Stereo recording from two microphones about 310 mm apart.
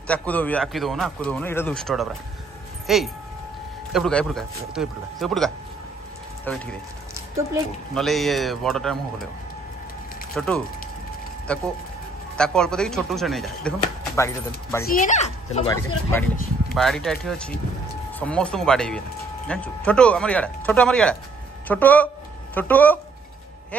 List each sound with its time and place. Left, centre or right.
0.1 s speech: centre
7.9 s speech: centre
10.3 s speech: centre
14.9 s speech: left
16.7 s speech: centre